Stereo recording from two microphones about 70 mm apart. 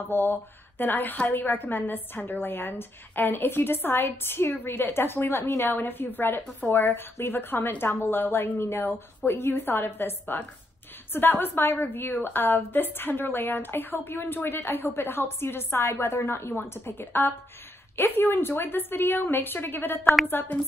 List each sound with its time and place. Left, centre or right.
0.1 s a woman's voice: left